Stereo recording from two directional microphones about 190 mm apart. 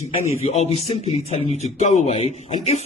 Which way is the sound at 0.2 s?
35° left (ahead or behind).